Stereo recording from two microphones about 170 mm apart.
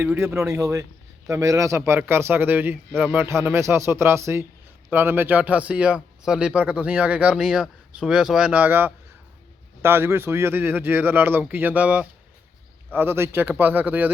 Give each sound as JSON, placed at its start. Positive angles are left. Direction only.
{"t": 0.0, "sound": "speech", "side_deg": -10}